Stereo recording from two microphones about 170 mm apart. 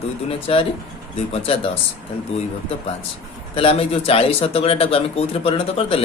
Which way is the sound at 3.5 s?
35° left (ahead or behind).